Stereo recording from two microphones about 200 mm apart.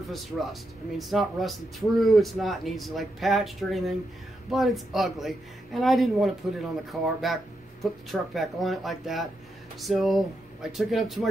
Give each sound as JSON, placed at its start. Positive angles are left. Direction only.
{"t": 0.0, "sound": "speech", "side_deg": 0}